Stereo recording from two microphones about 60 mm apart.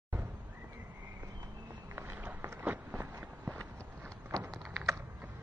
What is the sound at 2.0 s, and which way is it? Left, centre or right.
Run, right.